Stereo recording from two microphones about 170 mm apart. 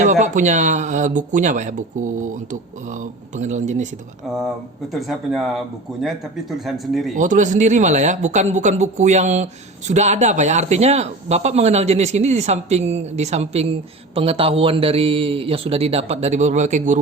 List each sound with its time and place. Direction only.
0.0 s speech: 45° right (ahead or behind)
4.9 s speech: centre (ahead or behind)
7.2 s speech: 45° right (ahead or behind)